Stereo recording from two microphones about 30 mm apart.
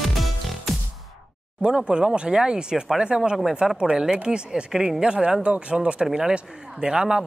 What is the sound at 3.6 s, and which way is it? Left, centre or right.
Speech, centre.